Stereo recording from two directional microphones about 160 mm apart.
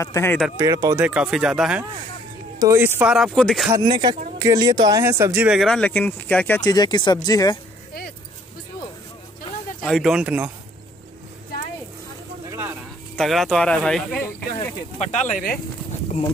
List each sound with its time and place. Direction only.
0.0 s speech: 15° left (ahead or behind)
0.6 s speech: 20° right (ahead or behind)
1.0 s speech: 5° right (ahead or behind)
2.6 s speech: 15° right (ahead or behind); by 3.7 s centre (ahead or behind)
3.8 s speech: 30° right (ahead or behind); by 5.6 s 10° right (ahead or behind)
5.6 s speech: 5° left (ahead or behind)
6.7 s speech: 25° left (ahead or behind)
9.8 s speech: centre (ahead or behind)
12.4 s a sound: 15° right (ahead or behind)
13.1 s speech: centre (ahead or behind)
15.0 s speech: 45° left (ahead or behind)